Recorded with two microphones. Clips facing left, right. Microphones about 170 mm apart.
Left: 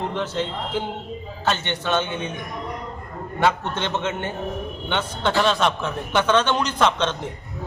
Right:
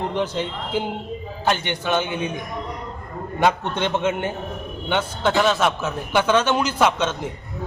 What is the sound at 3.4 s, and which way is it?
A man's voice, 15° right (ahead or behind).